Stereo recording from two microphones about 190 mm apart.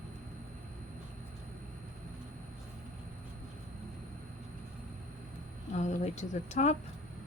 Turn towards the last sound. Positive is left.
turn(degrees=35)  # may be behind; listen again after turning